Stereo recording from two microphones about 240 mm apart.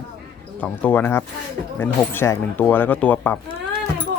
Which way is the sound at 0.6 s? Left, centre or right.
Centre.